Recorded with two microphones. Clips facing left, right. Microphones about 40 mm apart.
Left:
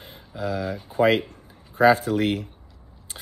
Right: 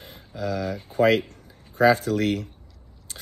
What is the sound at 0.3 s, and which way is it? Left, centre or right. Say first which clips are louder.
Speech: even; left.